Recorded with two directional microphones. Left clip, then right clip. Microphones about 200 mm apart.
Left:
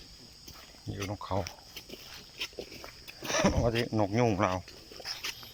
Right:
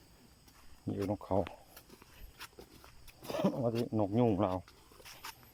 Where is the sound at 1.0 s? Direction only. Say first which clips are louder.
Even; 40° right (ahead or behind).